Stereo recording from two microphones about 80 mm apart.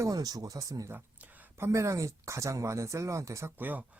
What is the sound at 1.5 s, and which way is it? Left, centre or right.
Speech, right.